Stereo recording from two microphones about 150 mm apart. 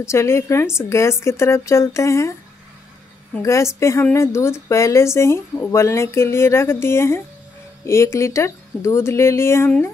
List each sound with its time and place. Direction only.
0.0 s a woman's voice: 20° left (ahead or behind)
3.4 s a woman's voice: 20° left (ahead or behind)